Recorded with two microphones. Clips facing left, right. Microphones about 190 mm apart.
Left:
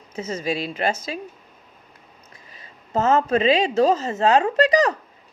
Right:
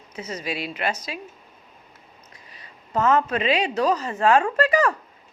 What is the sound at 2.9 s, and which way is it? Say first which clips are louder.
Speech: left 2 dB; 25° left (ahead or behind).